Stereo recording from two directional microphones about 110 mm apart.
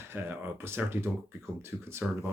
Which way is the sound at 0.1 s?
20° right (ahead or behind).